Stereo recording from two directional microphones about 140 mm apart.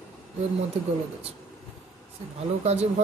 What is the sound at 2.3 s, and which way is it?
Speech, 50° right (ahead or behind).